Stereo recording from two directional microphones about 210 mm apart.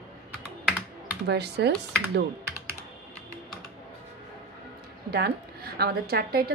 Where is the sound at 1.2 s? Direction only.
50° right (ahead or behind).